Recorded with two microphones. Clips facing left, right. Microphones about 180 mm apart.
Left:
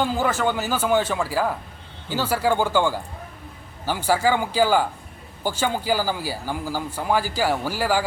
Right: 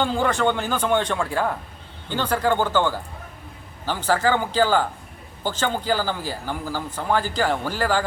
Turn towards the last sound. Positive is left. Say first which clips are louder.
# even
turn(degrees=10)  # may be behind; listen again after turning